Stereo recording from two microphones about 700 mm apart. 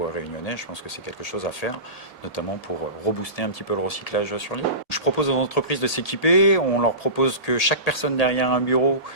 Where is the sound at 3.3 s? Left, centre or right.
Left.